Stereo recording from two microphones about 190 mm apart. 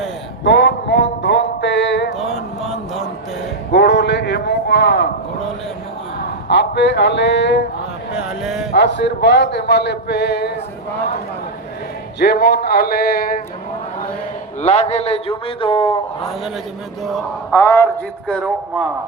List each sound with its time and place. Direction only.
0.4 s a sound: 65° left (ahead or behind)
2.6 s music: centre (ahead or behind)
3.7 s a sound: 65° left (ahead or behind)
6.5 s speech: 65° left (ahead or behind)
8.1 s a sound: centre (ahead or behind)
8.7 s speech: 65° left (ahead or behind)
12.2 s a man's voice: 55° left (ahead or behind)
14.6 s a man's voice: 35° left (ahead or behind)
17.0 s mantra: centre (ahead or behind)
17.5 s speech: 15° left (ahead or behind)
18.3 s mantra: 5° left (ahead or behind)